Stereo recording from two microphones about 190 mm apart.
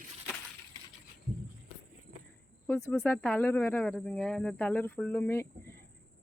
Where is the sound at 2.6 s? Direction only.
10° left (ahead or behind).